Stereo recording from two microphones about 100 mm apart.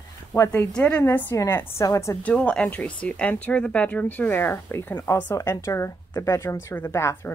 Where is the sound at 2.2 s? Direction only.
10° left (ahead or behind).